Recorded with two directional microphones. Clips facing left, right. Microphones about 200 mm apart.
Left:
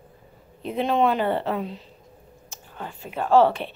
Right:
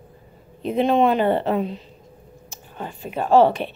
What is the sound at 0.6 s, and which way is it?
A woman's voice, 20° right (ahead or behind).